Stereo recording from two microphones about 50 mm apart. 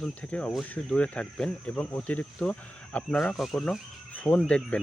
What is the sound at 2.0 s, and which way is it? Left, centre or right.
Speech, left.